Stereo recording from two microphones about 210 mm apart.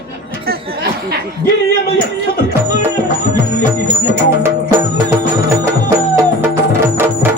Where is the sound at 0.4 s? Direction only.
45° right (ahead or behind).